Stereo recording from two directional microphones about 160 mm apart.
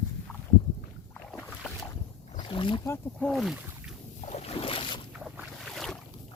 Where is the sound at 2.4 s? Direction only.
30° left (ahead or behind).